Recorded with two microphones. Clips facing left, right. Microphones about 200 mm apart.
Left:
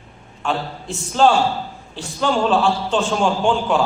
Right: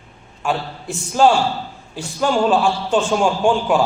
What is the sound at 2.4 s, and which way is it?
Speech, 15° right (ahead or behind).